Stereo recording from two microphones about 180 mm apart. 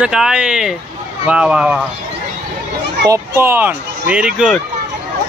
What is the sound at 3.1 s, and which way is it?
Speech, 10° right (ahead or behind).